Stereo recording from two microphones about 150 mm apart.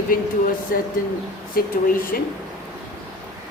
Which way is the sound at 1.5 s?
70° left (ahead or behind).